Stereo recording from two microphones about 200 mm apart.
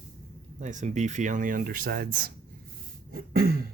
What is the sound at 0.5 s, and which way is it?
Speech, 35° right (ahead or behind).